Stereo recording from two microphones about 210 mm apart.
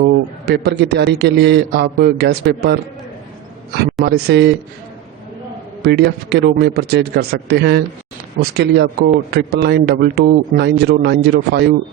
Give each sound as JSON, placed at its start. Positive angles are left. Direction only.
{"t": 0.0, "sound": "a man's voice", "side_deg": -50}
{"t": 4.0, "sound": "a man's voice", "side_deg": -50}
{"t": 5.8, "sound": "a man's voice", "side_deg": -50}